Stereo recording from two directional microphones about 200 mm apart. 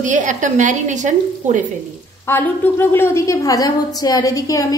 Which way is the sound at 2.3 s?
10° left (ahead or behind).